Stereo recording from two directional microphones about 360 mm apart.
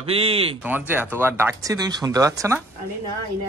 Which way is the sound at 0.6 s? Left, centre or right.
Centre.